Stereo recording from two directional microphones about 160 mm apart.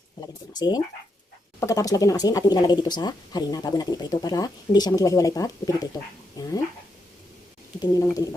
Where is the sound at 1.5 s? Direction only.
20° left (ahead or behind).